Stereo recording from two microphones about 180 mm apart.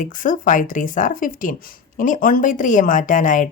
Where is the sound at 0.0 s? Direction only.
45° left (ahead or behind).